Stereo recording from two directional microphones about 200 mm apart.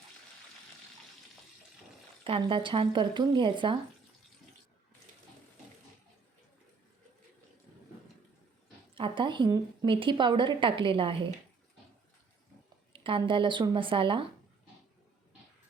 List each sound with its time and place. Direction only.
2.2 s a woman's voice: 25° right (ahead or behind)
9.0 s a woman's voice: 25° right (ahead or behind)
12.9 s a woman's voice: 25° right (ahead or behind)